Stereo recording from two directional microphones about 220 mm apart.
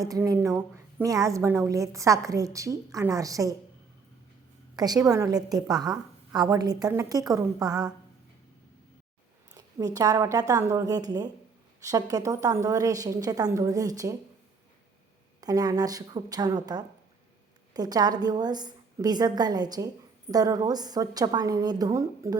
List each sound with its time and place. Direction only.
0.0 s a woman's voice: 15° right (ahead or behind)
4.9 s a woman's voice: 15° right (ahead or behind)
9.6 s a woman's voice: 15° right (ahead or behind)
15.4 s a woman's voice: 15° right (ahead or behind)